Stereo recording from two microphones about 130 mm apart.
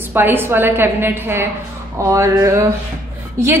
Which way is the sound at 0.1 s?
15° right (ahead or behind).